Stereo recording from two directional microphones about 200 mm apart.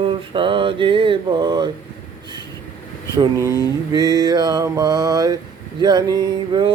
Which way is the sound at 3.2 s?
15° right (ahead or behind).